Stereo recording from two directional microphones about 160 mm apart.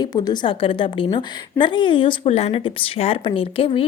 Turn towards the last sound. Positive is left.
turn(degrees=35)  # may be behind; listen again after turning